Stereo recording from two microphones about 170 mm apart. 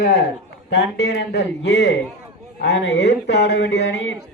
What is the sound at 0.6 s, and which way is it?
A man's voice, 90° left.